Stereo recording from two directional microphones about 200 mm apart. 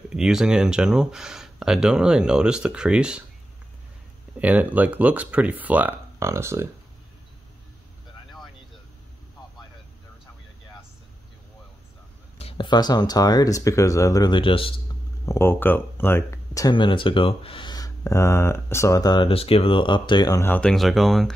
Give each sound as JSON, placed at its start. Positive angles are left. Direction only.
{"t": 0.1, "sound": "speech", "side_deg": -5}
{"t": 4.4, "sound": "speech", "side_deg": -5}
{"t": 12.4, "sound": "speech", "side_deg": 25}
{"t": 15.2, "sound": "speech", "side_deg": 10}